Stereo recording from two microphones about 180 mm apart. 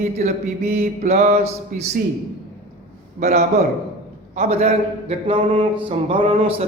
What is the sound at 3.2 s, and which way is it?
Speech, 35° right (ahead or behind).